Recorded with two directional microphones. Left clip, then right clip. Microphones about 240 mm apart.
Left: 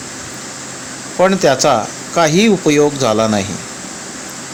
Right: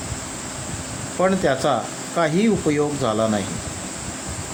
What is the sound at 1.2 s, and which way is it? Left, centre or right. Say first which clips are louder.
Speech: left 8 dB; centre.